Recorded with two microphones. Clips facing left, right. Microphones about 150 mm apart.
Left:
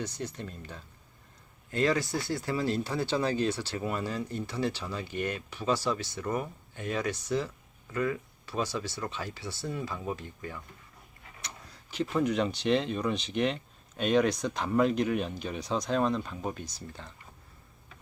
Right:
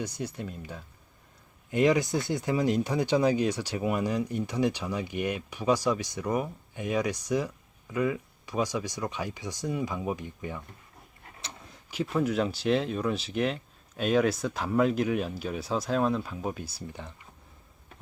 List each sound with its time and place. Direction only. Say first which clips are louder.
0.0 s speech: right 2 dB; 10° right (ahead or behind)
11.3 s a sound: right 1 dB; 30° right (ahead or behind)
11.9 s speech: even; 5° right (ahead or behind)